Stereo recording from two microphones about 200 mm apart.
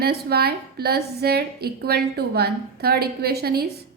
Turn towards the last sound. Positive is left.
turn(degrees=-50)  # may be behind; listen again after turning